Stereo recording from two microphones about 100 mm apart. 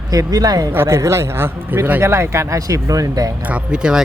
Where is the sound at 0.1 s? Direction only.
35° right (ahead or behind).